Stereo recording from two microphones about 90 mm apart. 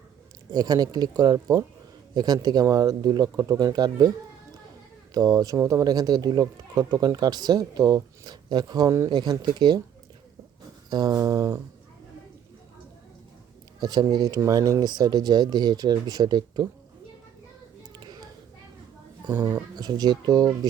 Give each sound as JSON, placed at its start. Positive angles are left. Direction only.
{"t": 0.5, "sound": "speech", "side_deg": -45}
{"t": 5.1, "sound": "speech", "side_deg": -45}
{"t": 10.8, "sound": "speech", "side_deg": -50}
{"t": 13.7, "sound": "speech", "side_deg": -50}
{"t": 17.9, "sound": "a sound", "side_deg": -50}
{"t": 19.7, "sound": "speech", "side_deg": -50}